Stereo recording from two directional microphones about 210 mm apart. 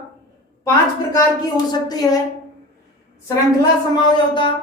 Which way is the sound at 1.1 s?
20° left (ahead or behind).